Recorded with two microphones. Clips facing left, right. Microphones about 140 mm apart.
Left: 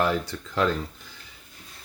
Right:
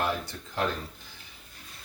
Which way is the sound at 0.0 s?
90° left.